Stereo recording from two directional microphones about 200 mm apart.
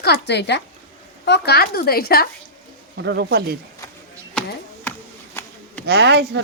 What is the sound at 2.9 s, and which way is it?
Speech, 60° right (ahead or behind).